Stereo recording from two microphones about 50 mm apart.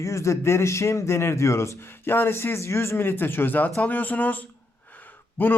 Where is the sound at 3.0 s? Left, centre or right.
Left.